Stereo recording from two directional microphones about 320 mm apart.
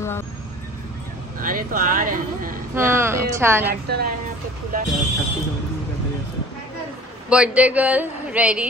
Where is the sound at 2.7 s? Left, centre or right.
Centre.